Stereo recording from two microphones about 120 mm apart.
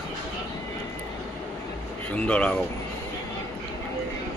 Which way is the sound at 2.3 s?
10° left (ahead or behind).